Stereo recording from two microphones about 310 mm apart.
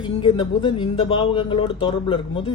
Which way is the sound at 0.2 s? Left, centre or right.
Centre.